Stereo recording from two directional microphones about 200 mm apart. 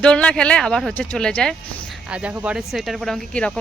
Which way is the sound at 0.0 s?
5° left (ahead or behind).